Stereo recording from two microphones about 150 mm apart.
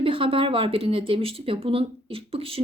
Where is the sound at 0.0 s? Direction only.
35° right (ahead or behind).